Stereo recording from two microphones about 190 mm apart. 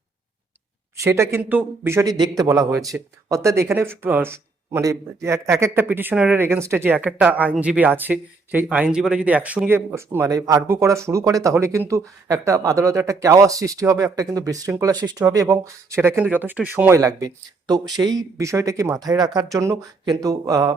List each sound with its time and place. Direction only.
0.9 s a man's voice: 15° right (ahead or behind)